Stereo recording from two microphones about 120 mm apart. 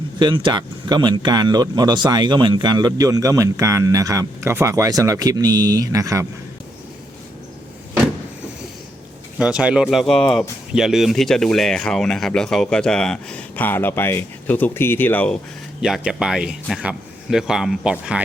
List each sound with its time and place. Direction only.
0.2 s speech: 40° right (ahead or behind)
9.4 s speech: 5° right (ahead or behind); by 15.4 s 15° left (ahead or behind)
15.8 s speech: 5° right (ahead or behind)